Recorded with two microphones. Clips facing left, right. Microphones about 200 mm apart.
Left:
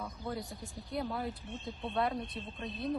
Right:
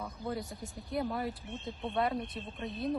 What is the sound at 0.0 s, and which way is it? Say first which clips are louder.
Speech: right 2 dB; 20° right (ahead or behind).